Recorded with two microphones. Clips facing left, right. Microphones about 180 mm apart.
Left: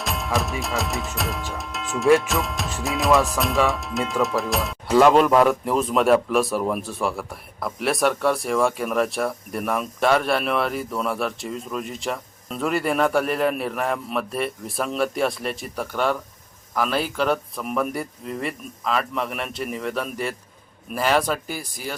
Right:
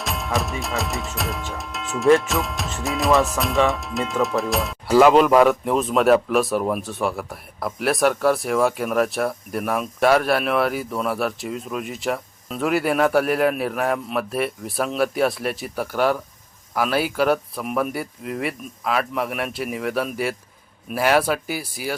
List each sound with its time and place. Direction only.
0.0 s music: centre (ahead or behind)
16.7 s speech: 5° right (ahead or behind)